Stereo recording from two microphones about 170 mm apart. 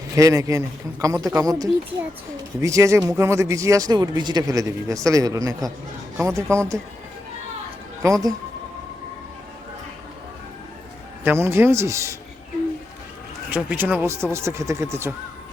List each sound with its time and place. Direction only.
0.1 s speech: 20° right (ahead or behind)
8.0 s speech: 20° right (ahead or behind)
11.2 s speech: 15° right (ahead or behind)
13.5 s speech: 10° right (ahead or behind)